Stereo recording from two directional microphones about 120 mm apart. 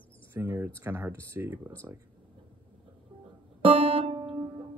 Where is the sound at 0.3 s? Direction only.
20° right (ahead or behind).